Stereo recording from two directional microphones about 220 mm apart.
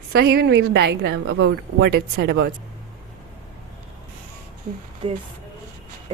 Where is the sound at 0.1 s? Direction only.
45° right (ahead or behind).